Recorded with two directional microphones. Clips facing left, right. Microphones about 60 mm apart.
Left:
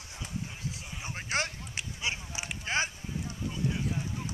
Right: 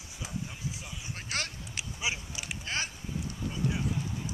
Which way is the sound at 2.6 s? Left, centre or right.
Left.